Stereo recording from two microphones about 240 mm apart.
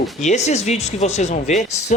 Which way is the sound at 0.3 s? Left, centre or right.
Left.